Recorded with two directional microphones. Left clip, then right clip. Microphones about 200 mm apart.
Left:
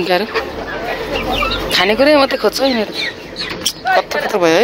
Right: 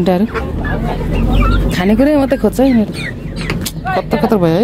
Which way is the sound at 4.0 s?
10° right (ahead or behind).